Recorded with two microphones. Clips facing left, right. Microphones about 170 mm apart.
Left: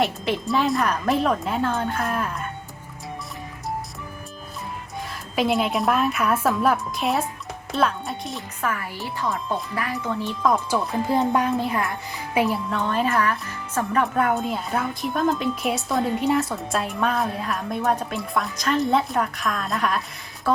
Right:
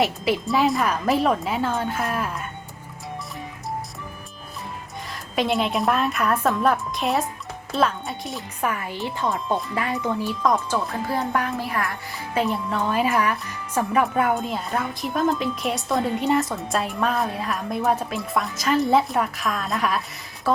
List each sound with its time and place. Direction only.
0.0 s a woman's voice: 5° right (ahead or behind)
5.0 s a woman's voice: centre (ahead or behind)
8.6 s speech: 20° right (ahead or behind)
10.2 s a woman's voice: centre (ahead or behind)
10.7 s a child's voice: 20° left (ahead or behind)
12.5 s a woman's voice: 5° right (ahead or behind)
14.0 s a woman's voice: centre (ahead or behind)